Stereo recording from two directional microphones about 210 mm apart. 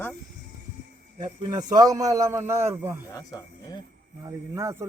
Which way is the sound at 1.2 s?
20° right (ahead or behind).